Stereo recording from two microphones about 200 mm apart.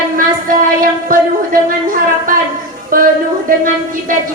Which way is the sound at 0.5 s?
45° right (ahead or behind).